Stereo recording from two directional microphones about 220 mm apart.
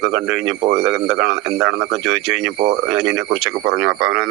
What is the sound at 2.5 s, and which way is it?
Speech, 45° right (ahead or behind).